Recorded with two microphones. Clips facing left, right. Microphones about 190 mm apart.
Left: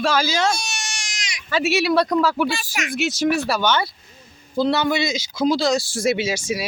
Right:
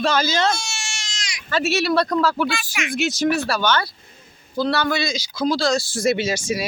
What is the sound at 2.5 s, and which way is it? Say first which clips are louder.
Speech: even; 35° left (ahead or behind).